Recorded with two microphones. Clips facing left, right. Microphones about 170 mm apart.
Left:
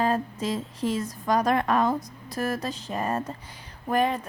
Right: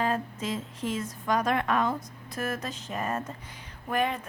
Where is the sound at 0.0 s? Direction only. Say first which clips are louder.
Left 4 dB; 35° left (ahead or behind).